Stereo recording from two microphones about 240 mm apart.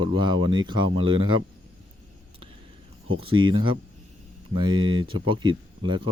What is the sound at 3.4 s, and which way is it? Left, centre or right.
Speech, right.